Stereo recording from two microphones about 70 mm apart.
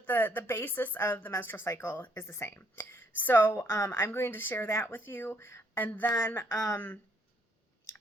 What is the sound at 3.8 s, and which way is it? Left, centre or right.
Speech, left.